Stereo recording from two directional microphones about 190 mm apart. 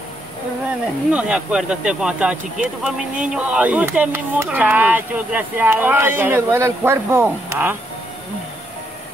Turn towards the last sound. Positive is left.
turn(degrees=-10)  # may be behind; listen again after turning